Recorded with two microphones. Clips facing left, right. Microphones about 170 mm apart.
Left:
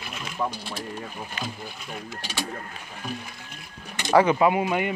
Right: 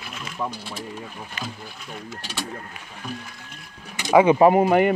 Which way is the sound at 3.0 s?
Centre (ahead or behind).